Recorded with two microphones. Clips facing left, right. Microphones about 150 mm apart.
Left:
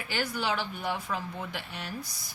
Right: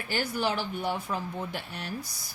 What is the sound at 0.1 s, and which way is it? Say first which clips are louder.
Speech: right 2 dB; 45° right (ahead or behind).